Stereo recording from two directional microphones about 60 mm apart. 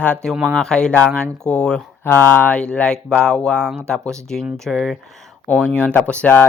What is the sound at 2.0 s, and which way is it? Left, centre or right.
Speech, left.